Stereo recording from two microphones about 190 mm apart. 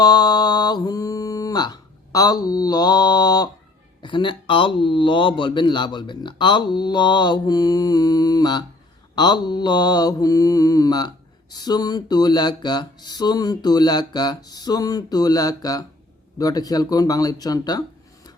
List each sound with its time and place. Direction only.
0.0 s mantra: 20° left (ahead or behind)
4.0 s a man's voice: 25° left (ahead or behind)